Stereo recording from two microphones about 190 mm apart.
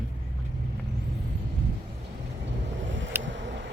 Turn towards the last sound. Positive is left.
turn(degrees=-75)  # may be behind; listen again after turning